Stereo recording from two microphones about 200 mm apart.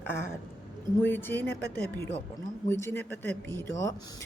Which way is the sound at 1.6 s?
50° left (ahead or behind).